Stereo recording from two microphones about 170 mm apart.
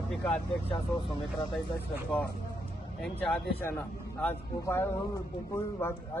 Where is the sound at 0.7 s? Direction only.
35° left (ahead or behind).